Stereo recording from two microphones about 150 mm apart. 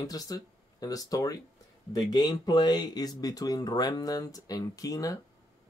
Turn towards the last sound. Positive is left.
turn(degrees=25)  # may be behind; listen again after turning